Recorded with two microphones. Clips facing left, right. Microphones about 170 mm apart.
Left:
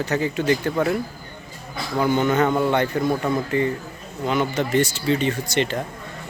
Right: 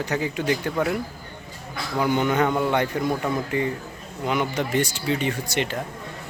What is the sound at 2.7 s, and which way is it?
Speech, 10° right (ahead or behind).